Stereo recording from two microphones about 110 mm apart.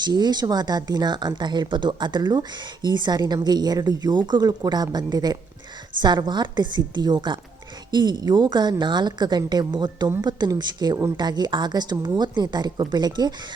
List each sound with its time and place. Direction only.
0.0 s a woman's voice: 40° right (ahead or behind)